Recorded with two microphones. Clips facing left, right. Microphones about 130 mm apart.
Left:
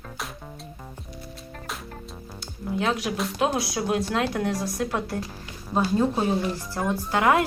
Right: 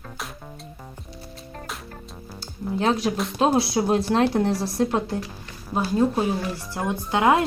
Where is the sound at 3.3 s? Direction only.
25° right (ahead or behind).